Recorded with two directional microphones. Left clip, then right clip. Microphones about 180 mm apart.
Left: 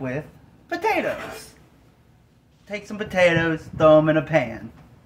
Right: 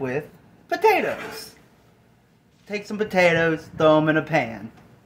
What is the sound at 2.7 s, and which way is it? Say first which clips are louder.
Speech: right 3 dB; 20° right (ahead or behind).